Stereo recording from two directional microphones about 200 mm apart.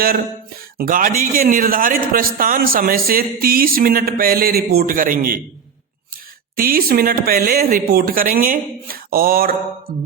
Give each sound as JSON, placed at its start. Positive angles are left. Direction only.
{"t": 0.8, "sound": "a man's voice", "side_deg": -45}
{"t": 6.6, "sound": "a man's voice", "side_deg": -45}